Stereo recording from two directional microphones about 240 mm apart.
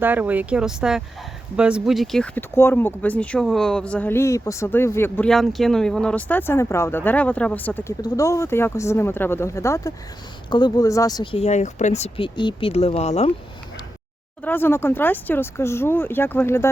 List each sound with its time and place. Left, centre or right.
0.0 s speech: centre; by 13.3 s left
14.4 s speech: centre